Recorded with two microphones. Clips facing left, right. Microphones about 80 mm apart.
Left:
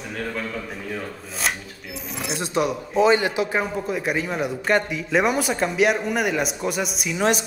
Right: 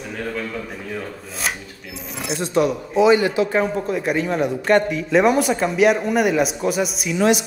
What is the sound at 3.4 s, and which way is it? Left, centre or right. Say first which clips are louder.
A man's voice: right 4 dB; centre.